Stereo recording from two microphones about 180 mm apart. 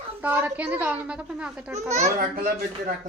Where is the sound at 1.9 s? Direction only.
40° right (ahead or behind).